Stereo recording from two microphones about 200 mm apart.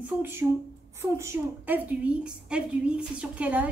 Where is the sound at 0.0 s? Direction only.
10° right (ahead or behind).